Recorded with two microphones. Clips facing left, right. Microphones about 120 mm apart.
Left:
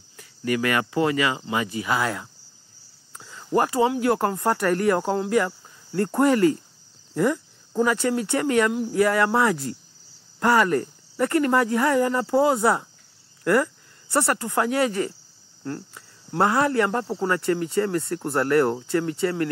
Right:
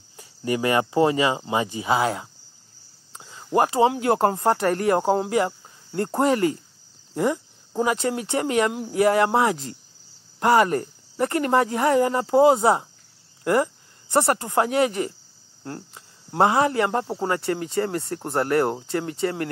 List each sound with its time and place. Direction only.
0.2 s speech: 25° right (ahead or behind)
13.4 s cricket: 20° right (ahead or behind)
14.1 s speech: 25° right (ahead or behind)